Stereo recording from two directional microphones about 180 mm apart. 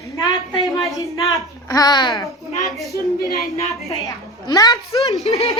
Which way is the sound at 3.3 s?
15° left (ahead or behind).